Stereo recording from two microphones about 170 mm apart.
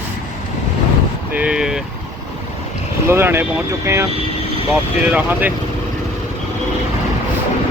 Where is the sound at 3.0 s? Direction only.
15° right (ahead or behind).